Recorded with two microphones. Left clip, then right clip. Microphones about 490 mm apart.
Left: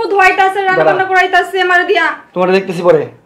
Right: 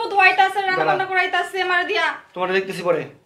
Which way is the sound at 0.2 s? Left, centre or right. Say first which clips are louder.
Left 5 dB; left.